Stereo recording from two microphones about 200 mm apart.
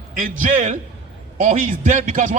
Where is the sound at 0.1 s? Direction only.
40° right (ahead or behind).